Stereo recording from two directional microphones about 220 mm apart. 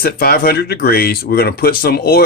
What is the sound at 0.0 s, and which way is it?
Speech, 45° left (ahead or behind).